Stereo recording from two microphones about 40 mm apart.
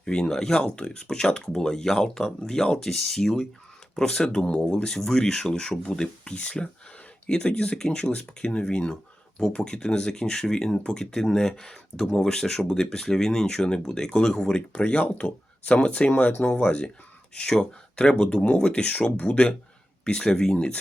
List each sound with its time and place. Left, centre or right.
0.0 s speech: centre
0.6 s speech: left
16.5 s speech: left